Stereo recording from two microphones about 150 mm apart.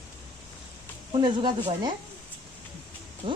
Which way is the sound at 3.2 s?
40° right (ahead or behind).